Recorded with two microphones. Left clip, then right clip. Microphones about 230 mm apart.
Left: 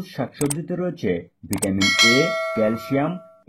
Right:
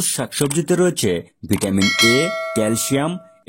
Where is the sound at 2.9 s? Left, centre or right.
Right.